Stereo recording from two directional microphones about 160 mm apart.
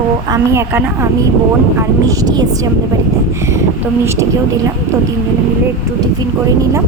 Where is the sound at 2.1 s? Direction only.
25° right (ahead or behind).